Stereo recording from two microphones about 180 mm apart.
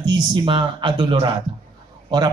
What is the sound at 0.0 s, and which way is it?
Speech, 25° right (ahead or behind).